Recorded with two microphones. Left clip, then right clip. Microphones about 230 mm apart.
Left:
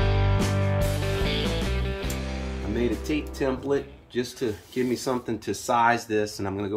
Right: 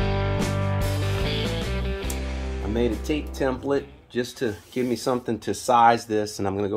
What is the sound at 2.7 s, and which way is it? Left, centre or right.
Music, right.